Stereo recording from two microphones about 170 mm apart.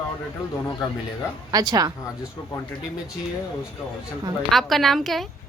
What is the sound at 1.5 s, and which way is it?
Speech, 20° right (ahead or behind).